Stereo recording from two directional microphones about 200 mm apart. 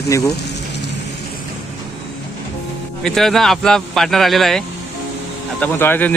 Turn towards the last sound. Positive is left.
turn(degrees=10)  # may be behind; listen again after turning